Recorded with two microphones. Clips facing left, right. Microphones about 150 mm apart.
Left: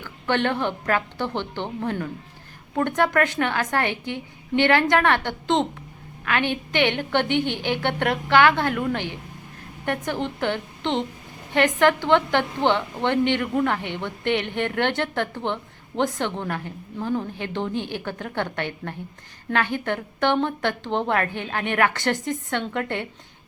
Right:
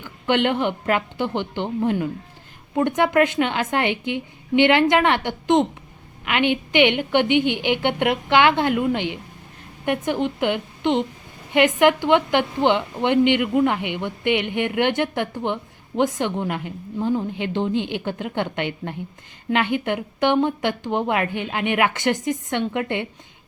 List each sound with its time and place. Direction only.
0.0 s a woman's voice: 15° right (ahead or behind)